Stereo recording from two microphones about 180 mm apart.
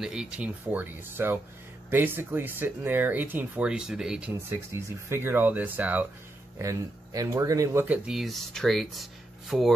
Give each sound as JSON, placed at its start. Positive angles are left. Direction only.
{"t": 0.0, "sound": "speech", "side_deg": -5}
{"t": 8.1, "sound": "speech", "side_deg": 0}